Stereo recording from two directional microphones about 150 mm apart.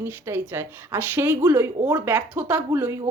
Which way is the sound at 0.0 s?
15° right (ahead or behind).